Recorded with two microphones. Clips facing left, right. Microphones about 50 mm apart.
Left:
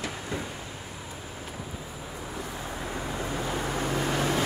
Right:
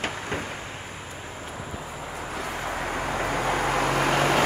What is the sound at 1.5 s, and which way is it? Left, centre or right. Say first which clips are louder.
Vehicle: right 4 dB; right.